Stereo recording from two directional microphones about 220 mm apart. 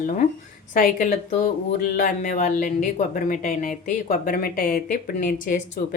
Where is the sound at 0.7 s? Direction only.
35° left (ahead or behind).